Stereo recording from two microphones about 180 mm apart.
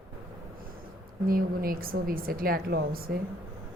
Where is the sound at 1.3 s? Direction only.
55° right (ahead or behind).